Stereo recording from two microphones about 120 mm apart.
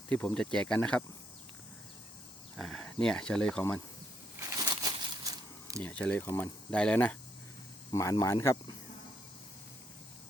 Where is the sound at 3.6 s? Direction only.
25° left (ahead or behind).